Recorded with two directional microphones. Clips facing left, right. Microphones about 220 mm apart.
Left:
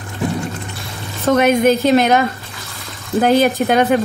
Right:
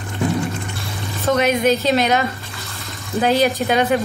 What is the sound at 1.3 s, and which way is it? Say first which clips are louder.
Speech: left 4 dB; 50° left (ahead or behind).